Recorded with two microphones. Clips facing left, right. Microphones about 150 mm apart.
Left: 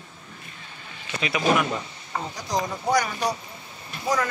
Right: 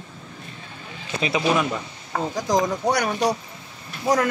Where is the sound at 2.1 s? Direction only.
90° right.